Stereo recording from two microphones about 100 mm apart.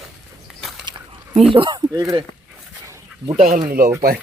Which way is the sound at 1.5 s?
60° right (ahead or behind).